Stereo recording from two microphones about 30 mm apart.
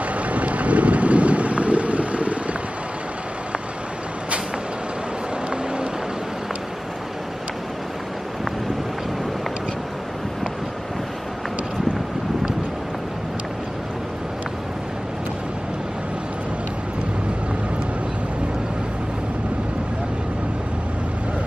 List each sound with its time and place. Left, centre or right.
0.1 s vehicle: right